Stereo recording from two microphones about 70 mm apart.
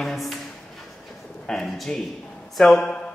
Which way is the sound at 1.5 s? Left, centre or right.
Centre.